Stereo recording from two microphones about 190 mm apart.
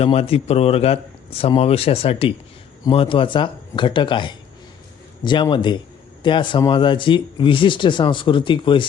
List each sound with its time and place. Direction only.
0.0 s a man's voice: 30° left (ahead or behind)